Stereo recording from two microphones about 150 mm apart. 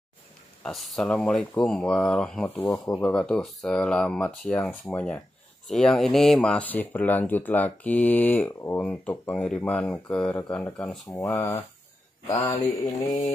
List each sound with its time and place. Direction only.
0.7 s speech: centre (ahead or behind)
11.2 s speech: 20° left (ahead or behind)